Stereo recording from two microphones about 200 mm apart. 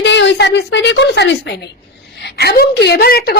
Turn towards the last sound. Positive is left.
turn(degrees=50)  # may be behind; listen again after turning